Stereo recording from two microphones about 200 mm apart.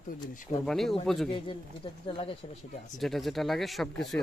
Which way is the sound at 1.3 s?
25° left (ahead or behind).